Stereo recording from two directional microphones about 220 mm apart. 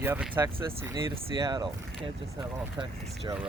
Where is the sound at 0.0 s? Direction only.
10° right (ahead or behind).